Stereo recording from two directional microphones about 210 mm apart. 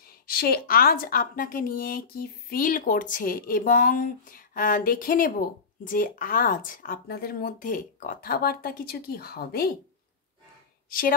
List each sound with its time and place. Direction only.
0.3 s a woman's voice: 45° left (ahead or behind)
10.9 s a woman's voice: 40° left (ahead or behind)